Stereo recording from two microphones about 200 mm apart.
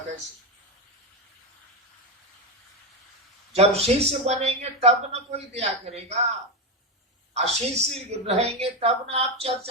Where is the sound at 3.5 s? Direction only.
30° right (ahead or behind).